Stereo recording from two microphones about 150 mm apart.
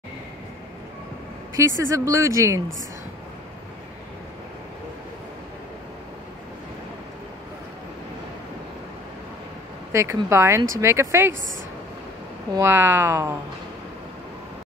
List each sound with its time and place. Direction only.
1.6 s speech: 20° right (ahead or behind)
9.9 s speech: 20° right (ahead or behind)
12.5 s speech: 15° right (ahead or behind)